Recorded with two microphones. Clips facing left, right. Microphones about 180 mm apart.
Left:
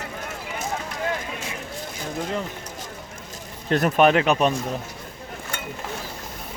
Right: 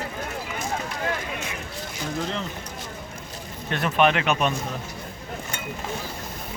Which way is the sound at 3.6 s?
40° left (ahead or behind).